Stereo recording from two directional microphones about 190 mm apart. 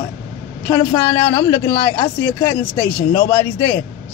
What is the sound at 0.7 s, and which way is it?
A woman's voice, 15° left (ahead or behind).